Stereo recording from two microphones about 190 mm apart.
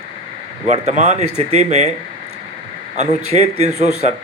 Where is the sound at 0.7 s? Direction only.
35° right (ahead or behind).